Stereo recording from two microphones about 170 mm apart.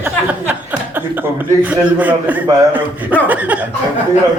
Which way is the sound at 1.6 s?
10° right (ahead or behind).